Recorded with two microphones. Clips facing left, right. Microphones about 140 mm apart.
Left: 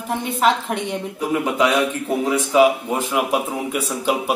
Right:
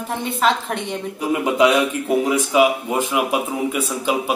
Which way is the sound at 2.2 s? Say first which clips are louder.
Left 3 dB; 10° right (ahead or behind).